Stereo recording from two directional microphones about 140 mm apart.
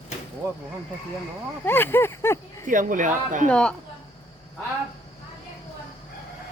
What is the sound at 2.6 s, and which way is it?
Speech, 70° right (ahead or behind).